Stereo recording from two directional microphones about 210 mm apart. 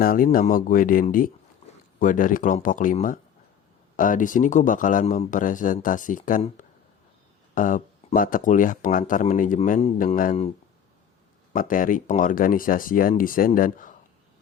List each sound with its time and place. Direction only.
0.0 s speech: 40° left (ahead or behind)
11.5 s speech: 40° left (ahead or behind)